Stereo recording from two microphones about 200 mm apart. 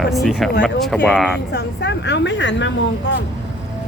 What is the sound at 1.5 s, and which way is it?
A woman's voice, 60° left (ahead or behind).